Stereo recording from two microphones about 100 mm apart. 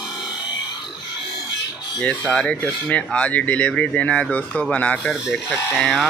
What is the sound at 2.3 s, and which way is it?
Speech, 10° left (ahead or behind).